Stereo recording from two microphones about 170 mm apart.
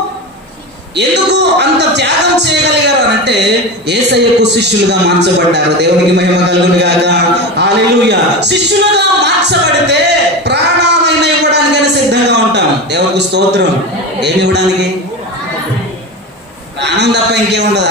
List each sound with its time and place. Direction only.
0.9 s speech: 85° right
16.8 s speech: 90° right